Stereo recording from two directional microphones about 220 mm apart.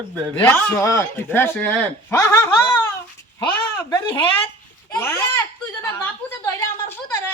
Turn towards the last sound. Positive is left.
turn(degrees=10)  # may be behind; listen again after turning